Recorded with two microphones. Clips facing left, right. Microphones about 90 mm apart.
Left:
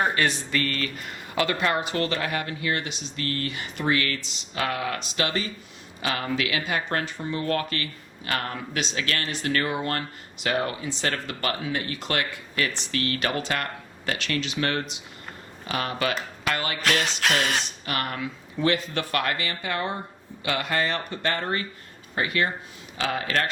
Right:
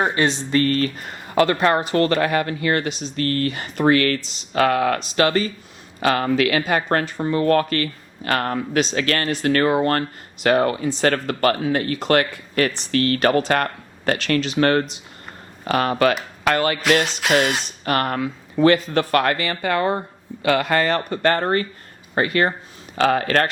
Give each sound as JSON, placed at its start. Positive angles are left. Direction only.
{"t": 0.1, "sound": "speech", "side_deg": -25}
{"t": 9.0, "sound": "speech", "side_deg": -55}
{"t": 17.1, "sound": "a sound", "side_deg": 0}
{"t": 17.8, "sound": "speech", "side_deg": -50}